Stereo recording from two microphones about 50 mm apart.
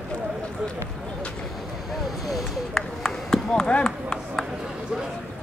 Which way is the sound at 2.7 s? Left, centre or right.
Centre.